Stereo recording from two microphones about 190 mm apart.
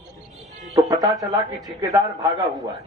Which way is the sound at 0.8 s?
20° right (ahead or behind).